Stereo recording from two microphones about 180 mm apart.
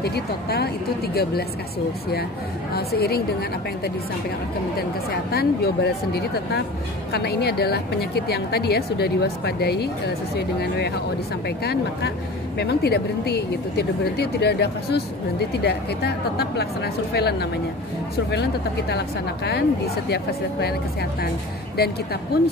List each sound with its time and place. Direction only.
0.0 s speech: 65° left (ahead or behind)
2.7 s speech: 60° left (ahead or behind)
20.6 s speech: 65° left (ahead or behind)